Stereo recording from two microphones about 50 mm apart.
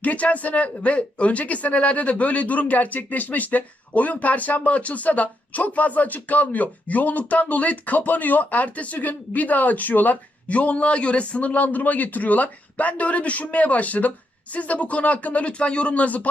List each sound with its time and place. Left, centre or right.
0.0 s speech: left